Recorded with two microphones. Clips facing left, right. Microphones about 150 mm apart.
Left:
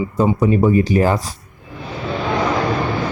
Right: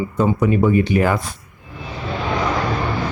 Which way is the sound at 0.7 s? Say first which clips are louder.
Left 2 dB; 35° left (ahead or behind).